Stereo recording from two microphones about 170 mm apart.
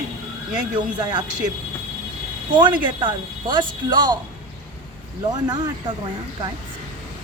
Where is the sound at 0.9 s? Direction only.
25° right (ahead or behind).